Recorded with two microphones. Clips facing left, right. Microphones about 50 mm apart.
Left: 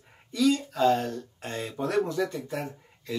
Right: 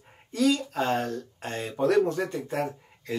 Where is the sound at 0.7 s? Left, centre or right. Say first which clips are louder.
Left 3 dB; right.